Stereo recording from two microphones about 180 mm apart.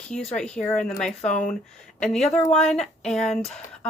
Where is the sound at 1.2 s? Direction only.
40° left (ahead or behind).